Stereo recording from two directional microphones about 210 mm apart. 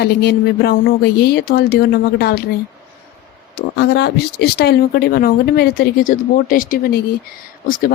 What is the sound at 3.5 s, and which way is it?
Speech, 55° left (ahead or behind).